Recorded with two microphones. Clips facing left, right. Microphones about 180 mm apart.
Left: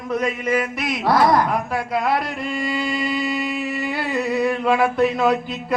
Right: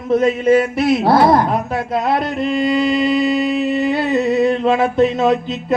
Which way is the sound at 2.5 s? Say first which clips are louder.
Right 9 dB; 25° right (ahead or behind).